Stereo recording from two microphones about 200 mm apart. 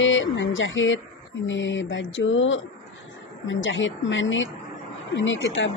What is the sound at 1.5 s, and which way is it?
Speech, 70° left (ahead or behind).